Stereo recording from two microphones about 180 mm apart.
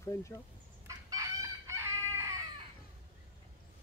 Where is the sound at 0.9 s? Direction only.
20° right (ahead or behind).